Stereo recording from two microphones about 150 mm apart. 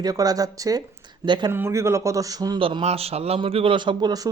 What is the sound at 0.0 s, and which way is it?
Speech, 25° right (ahead or behind).